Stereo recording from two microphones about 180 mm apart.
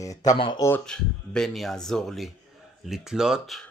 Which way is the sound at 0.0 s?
20° left (ahead or behind).